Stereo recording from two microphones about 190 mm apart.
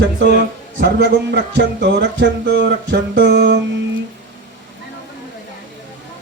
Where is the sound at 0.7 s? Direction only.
65° right (ahead or behind).